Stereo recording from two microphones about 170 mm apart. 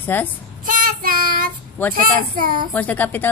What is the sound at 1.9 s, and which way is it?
Speech, 55° right (ahead or behind).